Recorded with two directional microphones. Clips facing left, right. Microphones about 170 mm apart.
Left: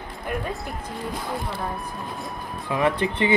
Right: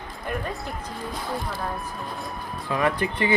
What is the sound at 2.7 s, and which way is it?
Speech, 20° left (ahead or behind).